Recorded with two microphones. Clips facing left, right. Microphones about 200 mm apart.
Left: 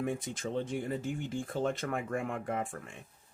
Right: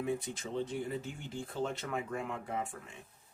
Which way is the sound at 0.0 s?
50° left (ahead or behind).